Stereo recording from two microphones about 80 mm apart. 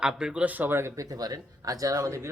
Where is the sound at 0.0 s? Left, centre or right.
Centre; by 1.0 s right.